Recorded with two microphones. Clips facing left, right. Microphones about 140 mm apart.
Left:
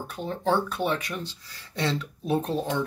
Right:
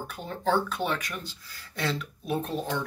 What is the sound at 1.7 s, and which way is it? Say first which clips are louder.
Speech: left 3 dB; 30° left (ahead or behind).